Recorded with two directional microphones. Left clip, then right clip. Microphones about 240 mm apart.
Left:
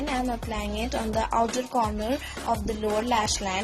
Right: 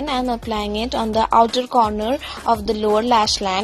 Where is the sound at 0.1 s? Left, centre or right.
Right.